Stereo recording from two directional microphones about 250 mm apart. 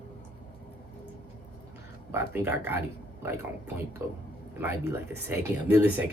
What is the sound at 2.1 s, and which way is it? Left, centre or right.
Speech, centre.